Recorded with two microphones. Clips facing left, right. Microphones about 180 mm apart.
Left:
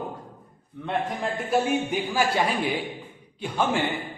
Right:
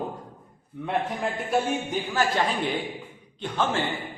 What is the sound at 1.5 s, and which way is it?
A man's voice, 5° left (ahead or behind).